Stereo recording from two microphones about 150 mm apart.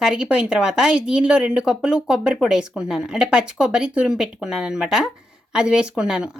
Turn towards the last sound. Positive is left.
turn(degrees=-5)  # may be behind; listen again after turning